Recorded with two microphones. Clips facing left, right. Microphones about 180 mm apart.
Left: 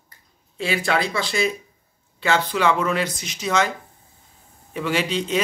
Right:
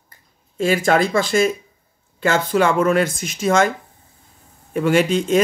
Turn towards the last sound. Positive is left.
turn(degrees=-50)  # may be behind; listen again after turning